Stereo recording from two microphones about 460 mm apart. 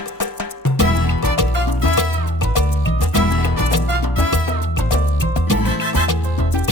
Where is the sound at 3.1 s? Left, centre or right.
Left.